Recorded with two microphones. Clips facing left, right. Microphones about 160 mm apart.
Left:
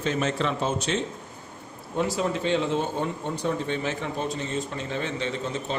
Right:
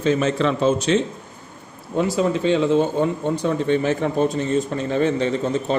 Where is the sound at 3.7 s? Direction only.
50° right (ahead or behind).